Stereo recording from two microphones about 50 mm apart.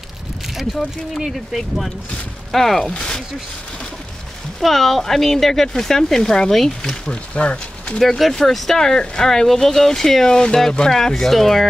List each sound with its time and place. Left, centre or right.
0.6 s speech: centre
4.6 s speech: centre
7.3 s speech: left
8.2 s speech: centre